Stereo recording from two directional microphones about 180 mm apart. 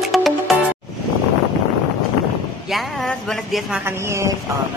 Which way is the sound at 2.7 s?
Centre (ahead or behind).